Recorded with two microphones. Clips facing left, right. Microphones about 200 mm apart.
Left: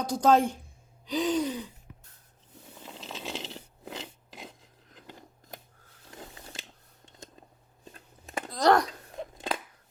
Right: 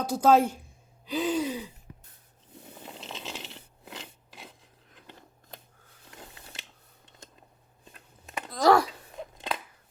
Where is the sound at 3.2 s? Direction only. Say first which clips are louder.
Left 6 dB; 20° left (ahead or behind).